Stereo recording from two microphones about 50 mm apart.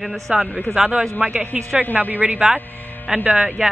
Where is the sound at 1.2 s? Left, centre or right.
Right.